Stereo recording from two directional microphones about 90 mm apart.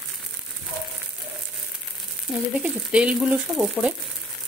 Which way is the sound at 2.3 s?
Centre (ahead or behind).